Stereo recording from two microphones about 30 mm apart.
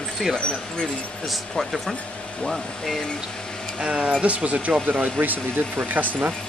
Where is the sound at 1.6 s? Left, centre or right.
Centre.